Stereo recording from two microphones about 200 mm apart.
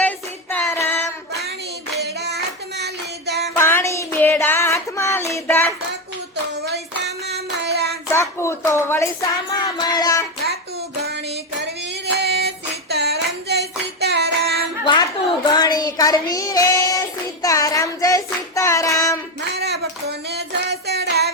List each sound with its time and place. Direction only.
0.5 s child singing: 10° left (ahead or behind)
2.0 s clapping: 55° right (ahead or behind)
3.5 s child singing: 10° left (ahead or behind)
6.6 s hands: 55° right (ahead or behind)
8.1 s a sound: 15° left (ahead or behind)
11.0 s female singing: 55° right (ahead or behind)
14.8 s child singing: 25° left (ahead or behind)
19.5 s music: 55° right (ahead or behind)